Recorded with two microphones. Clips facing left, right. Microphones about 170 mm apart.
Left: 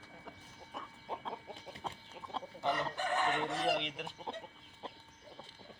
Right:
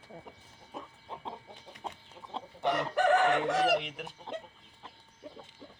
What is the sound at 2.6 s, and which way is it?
Chicken, 85° right.